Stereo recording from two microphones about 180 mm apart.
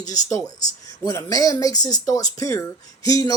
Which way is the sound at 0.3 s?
15° left (ahead or behind).